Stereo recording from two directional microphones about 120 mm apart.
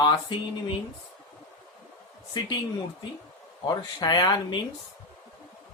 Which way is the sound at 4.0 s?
35° left (ahead or behind).